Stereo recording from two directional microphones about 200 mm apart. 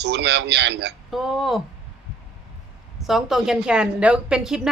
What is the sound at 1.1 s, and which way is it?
Speech, centre (ahead or behind).